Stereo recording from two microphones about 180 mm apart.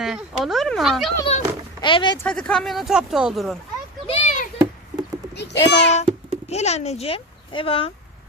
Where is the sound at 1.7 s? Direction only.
25° left (ahead or behind).